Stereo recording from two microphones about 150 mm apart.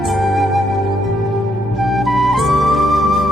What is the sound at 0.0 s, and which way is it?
Music, centre (ahead or behind).